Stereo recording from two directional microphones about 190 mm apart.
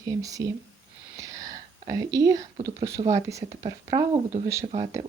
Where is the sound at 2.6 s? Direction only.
20° right (ahead or behind).